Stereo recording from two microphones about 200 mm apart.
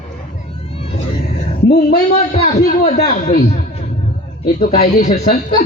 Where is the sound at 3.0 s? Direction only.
45° left (ahead or behind).